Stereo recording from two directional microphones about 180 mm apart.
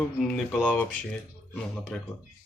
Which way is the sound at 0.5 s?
5° left (ahead or behind).